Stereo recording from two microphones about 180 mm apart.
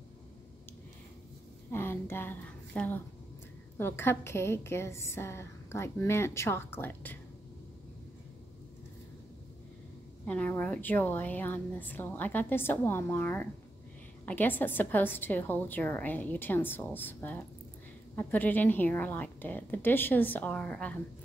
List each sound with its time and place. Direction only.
1.7 s a woman's voice: 15° left (ahead or behind)
10.2 s a woman's voice: 10° left (ahead or behind)